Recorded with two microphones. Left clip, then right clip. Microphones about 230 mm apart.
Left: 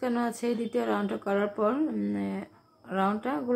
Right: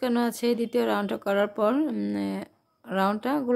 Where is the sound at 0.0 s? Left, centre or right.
Right.